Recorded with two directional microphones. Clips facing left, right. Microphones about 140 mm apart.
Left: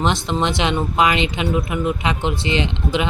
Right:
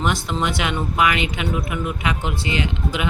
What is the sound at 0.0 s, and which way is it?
Speech, 25° left (ahead or behind).